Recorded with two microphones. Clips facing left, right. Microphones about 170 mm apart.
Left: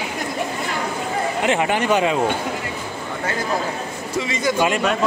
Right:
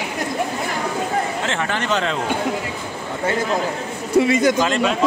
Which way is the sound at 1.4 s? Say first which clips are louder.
Left 4 dB; 15° left (ahead or behind).